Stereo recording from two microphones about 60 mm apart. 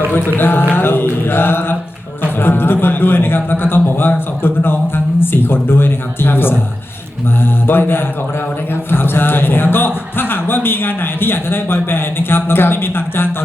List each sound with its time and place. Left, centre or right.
0.3 s a man's voice: left